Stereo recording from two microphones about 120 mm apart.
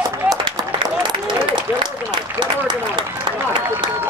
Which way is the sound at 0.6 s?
30° right (ahead or behind).